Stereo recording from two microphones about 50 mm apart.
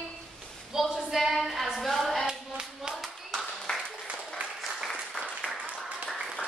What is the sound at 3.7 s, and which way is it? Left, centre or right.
Applause, centre.